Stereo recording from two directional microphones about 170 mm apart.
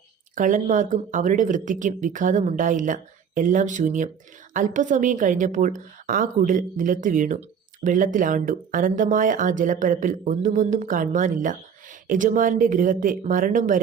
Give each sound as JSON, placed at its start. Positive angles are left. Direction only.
{"t": 0.3, "sound": "speech", "side_deg": -50}